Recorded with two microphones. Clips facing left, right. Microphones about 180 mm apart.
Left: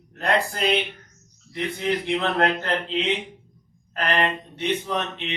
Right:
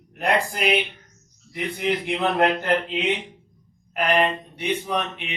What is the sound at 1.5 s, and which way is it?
Speech, 15° right (ahead or behind).